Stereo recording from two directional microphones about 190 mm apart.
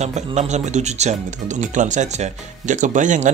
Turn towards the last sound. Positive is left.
turn(degrees=-40)  # may be behind; listen again after turning